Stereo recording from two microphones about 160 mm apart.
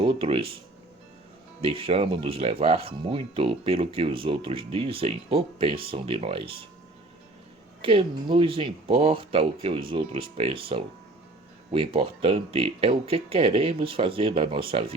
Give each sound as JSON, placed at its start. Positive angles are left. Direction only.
{"t": 0.0, "sound": "speech", "side_deg": -35}
{"t": 1.6, "sound": "speech", "side_deg": -35}
{"t": 7.8, "sound": "speech", "side_deg": -35}
{"t": 11.9, "sound": "speech", "side_deg": -35}